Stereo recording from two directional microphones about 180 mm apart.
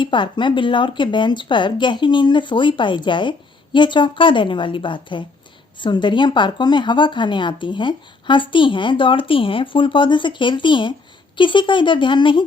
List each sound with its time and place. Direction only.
0.0 s speech: 25° left (ahead or behind)